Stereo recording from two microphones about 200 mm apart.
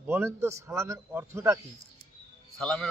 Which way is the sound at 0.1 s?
10° right (ahead or behind).